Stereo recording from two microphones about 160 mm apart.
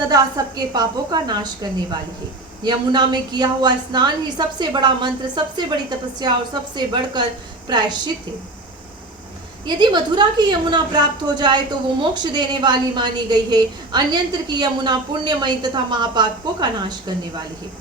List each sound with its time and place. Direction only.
0.1 s a woman's voice: 25° right (ahead or behind)
2.6 s a woman's voice: 25° right (ahead or behind)
9.6 s a woman's voice: 25° right (ahead or behind)